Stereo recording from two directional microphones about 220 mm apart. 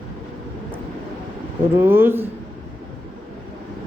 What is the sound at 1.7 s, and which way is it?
Speech, 10° right (ahead or behind).